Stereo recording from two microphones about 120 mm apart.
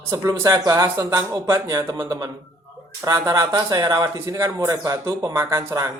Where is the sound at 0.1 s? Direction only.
30° right (ahead or behind).